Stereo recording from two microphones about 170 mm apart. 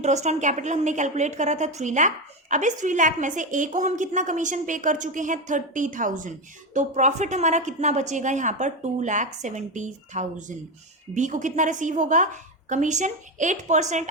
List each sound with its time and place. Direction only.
0.0 s a woman's voice: 40° right (ahead or behind)